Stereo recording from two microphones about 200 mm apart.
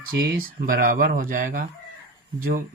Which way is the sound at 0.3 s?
45° right (ahead or behind).